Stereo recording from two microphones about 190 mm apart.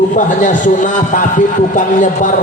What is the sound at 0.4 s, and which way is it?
A man's voice, 40° left (ahead or behind).